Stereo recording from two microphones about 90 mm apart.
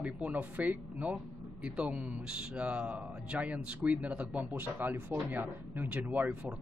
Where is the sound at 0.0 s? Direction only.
15° right (ahead or behind).